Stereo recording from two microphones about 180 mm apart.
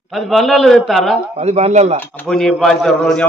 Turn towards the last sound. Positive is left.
turn(degrees=5)  # may be behind; listen again after turning